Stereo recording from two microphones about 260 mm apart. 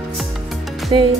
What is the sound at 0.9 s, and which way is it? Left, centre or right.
Speech, centre.